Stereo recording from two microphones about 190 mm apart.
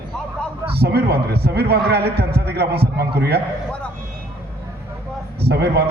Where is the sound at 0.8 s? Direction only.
55° right (ahead or behind).